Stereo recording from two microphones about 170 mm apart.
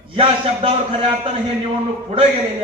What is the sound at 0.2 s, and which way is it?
A man's voice, 35° right (ahead or behind).